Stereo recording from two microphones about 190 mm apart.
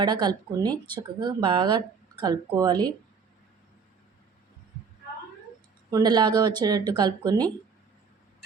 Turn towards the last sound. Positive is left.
turn(degrees=-20)  # may be behind; listen again after turning